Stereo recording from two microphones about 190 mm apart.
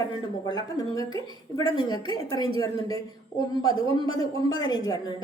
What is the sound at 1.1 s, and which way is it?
Speech, 30° right (ahead or behind).